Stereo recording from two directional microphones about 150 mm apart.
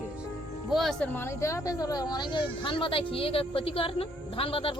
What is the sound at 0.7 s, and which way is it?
Speech, centre (ahead or behind).